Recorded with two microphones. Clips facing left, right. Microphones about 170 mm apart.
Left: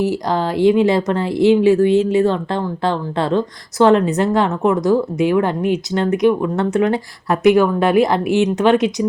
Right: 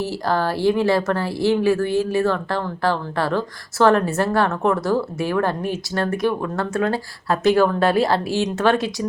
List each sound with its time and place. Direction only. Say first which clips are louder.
0.0 s speech: left 3 dB; 15° left (ahead or behind)